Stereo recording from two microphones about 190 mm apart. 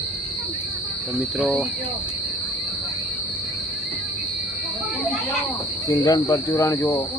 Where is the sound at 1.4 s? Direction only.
Centre (ahead or behind).